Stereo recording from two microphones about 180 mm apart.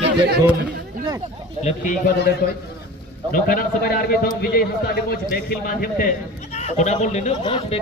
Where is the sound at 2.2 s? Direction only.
60° left (ahead or behind).